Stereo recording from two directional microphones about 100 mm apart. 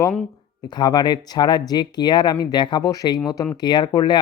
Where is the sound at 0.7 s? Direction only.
45° left (ahead or behind).